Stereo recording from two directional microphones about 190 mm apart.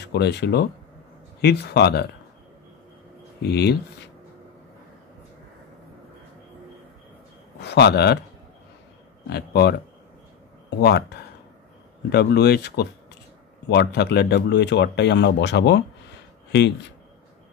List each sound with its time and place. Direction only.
0.0 s speech: 60° left (ahead or behind)
3.4 s speech: 60° left (ahead or behind)
7.6 s speech: 60° left (ahead or behind)
9.3 s speech: 60° left (ahead or behind)
10.8 s speech: 60° left (ahead or behind)